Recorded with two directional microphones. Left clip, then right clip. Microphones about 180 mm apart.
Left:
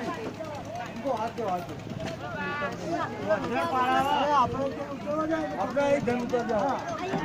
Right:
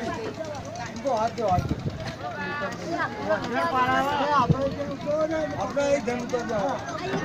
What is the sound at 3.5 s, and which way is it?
Speech, 40° left (ahead or behind).